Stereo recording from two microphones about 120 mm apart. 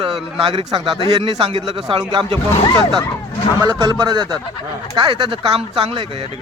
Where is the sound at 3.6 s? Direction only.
30° right (ahead or behind); by 6.0 s 50° right (ahead or behind).